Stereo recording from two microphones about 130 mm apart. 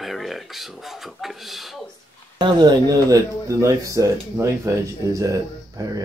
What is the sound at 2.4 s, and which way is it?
Speech, 35° right (ahead or behind).